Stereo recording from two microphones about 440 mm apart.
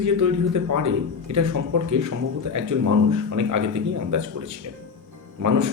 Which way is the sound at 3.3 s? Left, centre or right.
Right.